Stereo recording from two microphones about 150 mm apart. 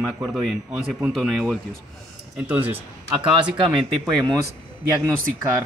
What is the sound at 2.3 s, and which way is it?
Speech, 10° right (ahead or behind).